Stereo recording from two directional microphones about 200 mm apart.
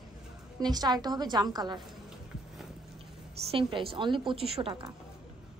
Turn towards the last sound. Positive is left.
turn(degrees=-25)  # may be behind; listen again after turning